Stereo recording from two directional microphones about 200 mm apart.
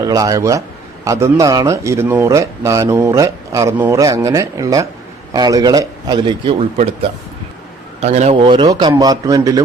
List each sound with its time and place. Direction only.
0.0 s speech: 15° right (ahead or behind)
8.0 s speech: 35° right (ahead or behind); by 9.6 s 15° right (ahead or behind)